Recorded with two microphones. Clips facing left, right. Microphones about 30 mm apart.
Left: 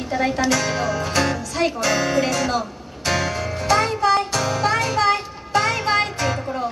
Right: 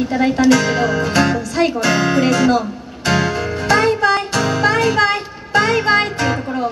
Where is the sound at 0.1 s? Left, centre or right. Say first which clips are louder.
Right 1 dB; centre.